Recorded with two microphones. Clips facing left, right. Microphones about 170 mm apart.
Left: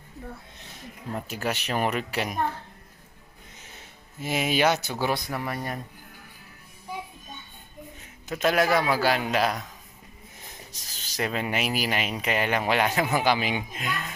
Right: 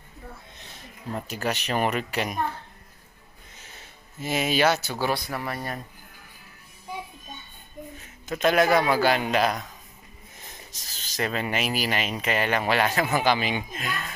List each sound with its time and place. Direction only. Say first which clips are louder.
1.3 s a man's voice: right 1 dB; 5° left (ahead or behind)
4.2 s speech: right 1 dB; 10° left (ahead or behind)
8.3 s a man's voice: right 2 dB; 5° left (ahead or behind)
10.7 s speech: even; 10° left (ahead or behind)